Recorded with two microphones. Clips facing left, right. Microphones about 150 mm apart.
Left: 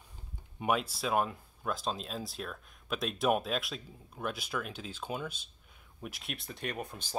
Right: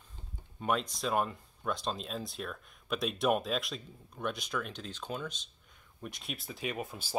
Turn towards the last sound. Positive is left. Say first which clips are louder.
# right 1 dB
turn(degrees=-5)  # may be behind; listen again after turning